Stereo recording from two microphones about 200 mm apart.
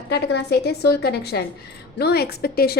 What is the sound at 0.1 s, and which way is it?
A woman's voice, 55° left (ahead or behind).